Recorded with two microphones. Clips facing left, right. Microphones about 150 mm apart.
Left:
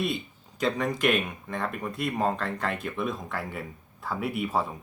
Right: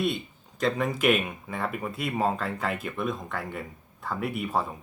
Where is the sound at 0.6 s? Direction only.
5° right (ahead or behind).